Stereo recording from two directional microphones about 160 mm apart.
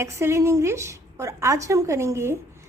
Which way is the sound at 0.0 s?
15° right (ahead or behind).